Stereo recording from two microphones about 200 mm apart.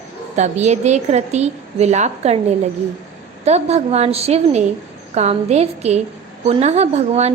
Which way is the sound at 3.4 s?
30° right (ahead or behind).